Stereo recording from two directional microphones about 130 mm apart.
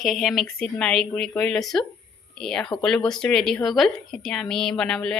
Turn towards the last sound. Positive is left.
turn(degrees=5)  # may be behind; listen again after turning